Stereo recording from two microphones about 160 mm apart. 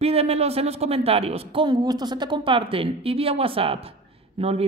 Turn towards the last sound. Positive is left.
turn(degrees=-40)  # may be behind; listen again after turning